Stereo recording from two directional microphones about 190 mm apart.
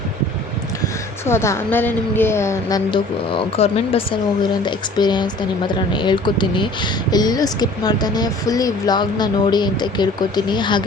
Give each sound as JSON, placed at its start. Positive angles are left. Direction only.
{"t": 1.3, "sound": "a woman's voice", "side_deg": 15}